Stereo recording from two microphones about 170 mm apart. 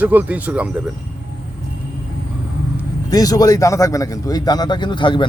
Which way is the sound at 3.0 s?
20° left (ahead or behind).